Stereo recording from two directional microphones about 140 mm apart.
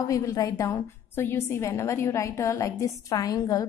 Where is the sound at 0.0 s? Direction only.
25° left (ahead or behind).